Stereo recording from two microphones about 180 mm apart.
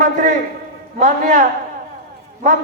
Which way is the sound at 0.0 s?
45° right (ahead or behind).